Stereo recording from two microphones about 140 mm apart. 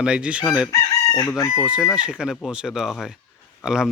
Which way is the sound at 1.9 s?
5° right (ahead or behind).